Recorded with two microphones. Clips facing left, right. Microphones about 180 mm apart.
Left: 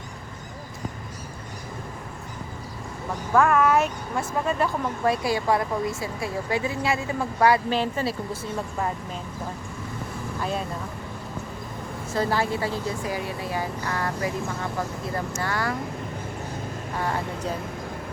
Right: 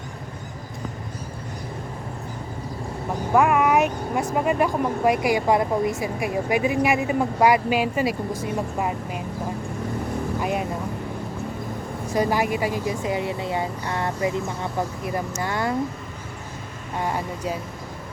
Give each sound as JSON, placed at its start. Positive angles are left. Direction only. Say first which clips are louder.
{"t": 3.1, "sound": "speech", "louder": "right 2 dB", "side_deg": -15}
{"t": 10.4, "sound": "speech", "louder": "right 1 dB", "side_deg": -15}
{"t": 12.1, "sound": "speech", "louder": "right 3 dB", "side_deg": -15}
{"t": 17.0, "sound": "speech", "louder": "right 2 dB", "side_deg": -15}